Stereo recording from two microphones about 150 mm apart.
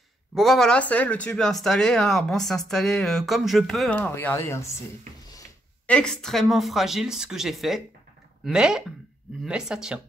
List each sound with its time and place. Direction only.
0.3 s speech: centre (ahead or behind)
4.1 s speech: 15° left (ahead or behind)
5.9 s speech: 5° left (ahead or behind)